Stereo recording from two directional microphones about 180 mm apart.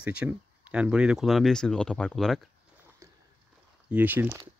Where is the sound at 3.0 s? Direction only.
15° right (ahead or behind).